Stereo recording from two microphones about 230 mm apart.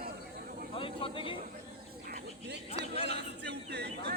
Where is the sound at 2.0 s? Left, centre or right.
Right.